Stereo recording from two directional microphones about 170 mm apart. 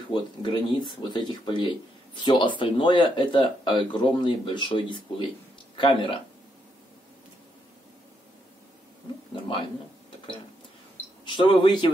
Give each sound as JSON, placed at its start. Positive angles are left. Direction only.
{"t": 0.1, "sound": "speech", "side_deg": 30}
{"t": 9.3, "sound": "a sound", "side_deg": 30}
{"t": 11.2, "sound": "speech", "side_deg": 25}